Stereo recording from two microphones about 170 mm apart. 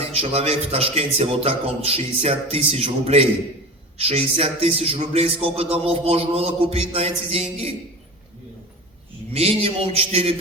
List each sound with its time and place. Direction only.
0.0 s a man's voice: 35° right (ahead or behind)
9.3 s a man's voice: 35° right (ahead or behind)